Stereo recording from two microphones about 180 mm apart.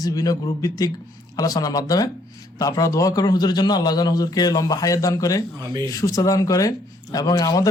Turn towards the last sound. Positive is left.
turn(degrees=20)  # may be behind; listen again after turning